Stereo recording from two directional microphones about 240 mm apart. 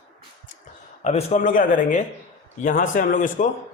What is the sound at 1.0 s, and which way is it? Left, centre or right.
A man's voice, left.